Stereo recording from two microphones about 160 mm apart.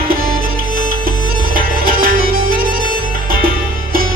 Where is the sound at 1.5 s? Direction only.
65° right (ahead or behind).